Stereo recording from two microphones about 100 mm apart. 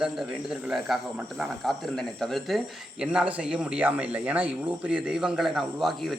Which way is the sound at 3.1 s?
15° right (ahead or behind).